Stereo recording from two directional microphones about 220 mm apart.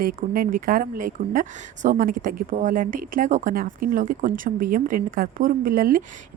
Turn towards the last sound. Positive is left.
turn(degrees=-40)  # may be behind; listen again after turning